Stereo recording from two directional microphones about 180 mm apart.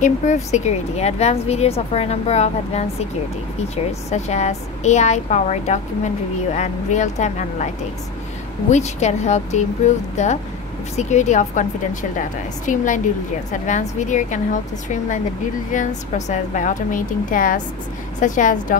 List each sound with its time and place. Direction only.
0.0 s a woman's voice: 40° left (ahead or behind)